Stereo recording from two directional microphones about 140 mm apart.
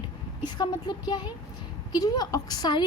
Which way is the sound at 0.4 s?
30° left (ahead or behind).